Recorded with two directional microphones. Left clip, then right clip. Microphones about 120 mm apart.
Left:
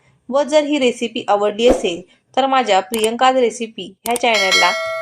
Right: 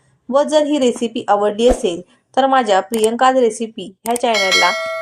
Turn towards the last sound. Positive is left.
turn(degrees=0)  # may be behind; listen again after turning